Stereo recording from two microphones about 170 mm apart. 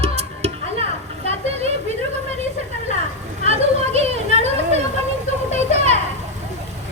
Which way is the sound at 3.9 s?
40° right (ahead or behind).